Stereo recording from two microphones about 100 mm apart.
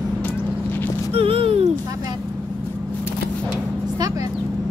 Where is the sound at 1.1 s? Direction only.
70° right (ahead or behind).